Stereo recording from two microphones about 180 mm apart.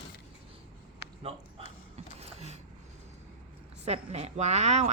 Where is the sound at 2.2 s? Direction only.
35° right (ahead or behind).